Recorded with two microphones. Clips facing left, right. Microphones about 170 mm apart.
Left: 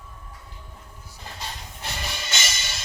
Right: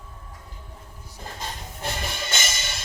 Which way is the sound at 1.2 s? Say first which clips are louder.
Right 2 dB; 50° right (ahead or behind).